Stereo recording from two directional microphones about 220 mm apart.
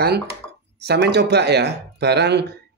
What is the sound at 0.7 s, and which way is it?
A man's voice, 50° right (ahead or behind).